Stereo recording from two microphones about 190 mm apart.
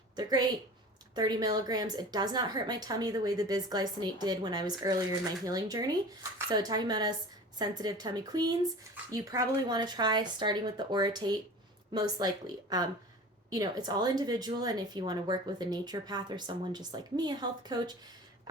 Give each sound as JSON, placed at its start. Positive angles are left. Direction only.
{"t": 0.2, "sound": "speech", "side_deg": -20}